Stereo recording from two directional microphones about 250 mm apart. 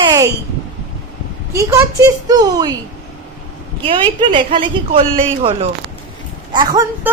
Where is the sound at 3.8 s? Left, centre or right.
Right.